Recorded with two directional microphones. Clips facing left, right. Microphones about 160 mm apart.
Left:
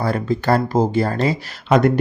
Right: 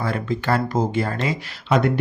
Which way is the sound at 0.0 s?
40° left (ahead or behind).